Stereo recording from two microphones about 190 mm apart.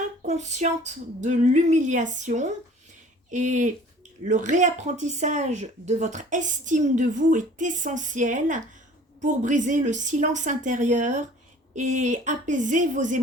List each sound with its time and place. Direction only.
0.2 s speech: 40° right (ahead or behind)